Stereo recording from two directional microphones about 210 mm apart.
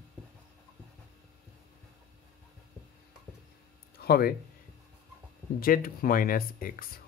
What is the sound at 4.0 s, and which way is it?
Speech, 45° left (ahead or behind).